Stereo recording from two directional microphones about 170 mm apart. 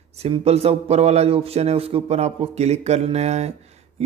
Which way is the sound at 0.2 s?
35° right (ahead or behind).